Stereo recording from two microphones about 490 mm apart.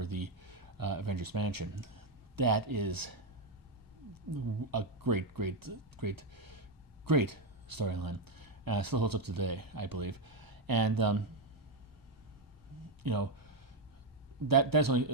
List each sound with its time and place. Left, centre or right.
0.0 s speech: right
13.0 s a sound: right
14.4 s speech: right